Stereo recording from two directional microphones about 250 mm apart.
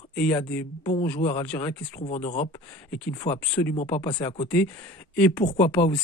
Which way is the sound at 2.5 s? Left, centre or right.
Centre.